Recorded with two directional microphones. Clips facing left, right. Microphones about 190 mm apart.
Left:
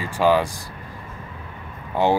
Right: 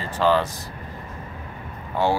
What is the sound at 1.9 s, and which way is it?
Speech, 15° left (ahead or behind).